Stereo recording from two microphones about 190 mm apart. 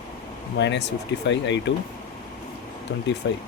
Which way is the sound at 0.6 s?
65° left (ahead or behind).